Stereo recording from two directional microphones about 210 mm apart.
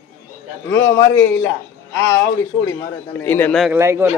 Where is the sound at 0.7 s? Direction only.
60° left (ahead or behind).